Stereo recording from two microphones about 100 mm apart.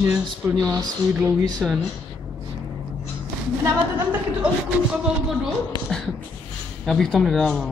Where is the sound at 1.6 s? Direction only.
5° right (ahead or behind).